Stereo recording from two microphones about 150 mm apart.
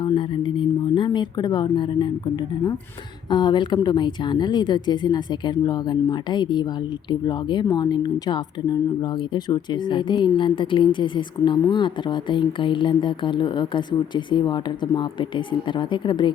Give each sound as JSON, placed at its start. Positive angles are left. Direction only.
{"t": 0.0, "sound": "speech", "side_deg": 35}